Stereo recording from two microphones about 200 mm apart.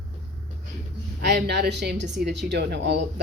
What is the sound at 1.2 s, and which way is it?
Speech, 55° right (ahead or behind).